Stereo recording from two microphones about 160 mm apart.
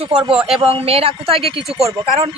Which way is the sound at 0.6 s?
35° right (ahead or behind).